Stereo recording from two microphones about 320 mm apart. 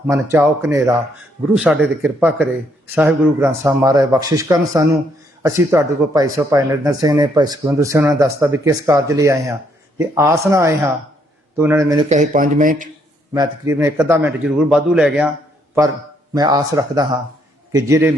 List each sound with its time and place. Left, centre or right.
0.1 s a man's voice: centre
12.0 s speech: right
13.3 s a man's voice: centre
16.3 s a man's voice: centre